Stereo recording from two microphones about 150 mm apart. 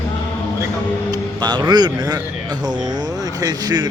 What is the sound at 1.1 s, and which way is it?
Speech, 30° right (ahead or behind).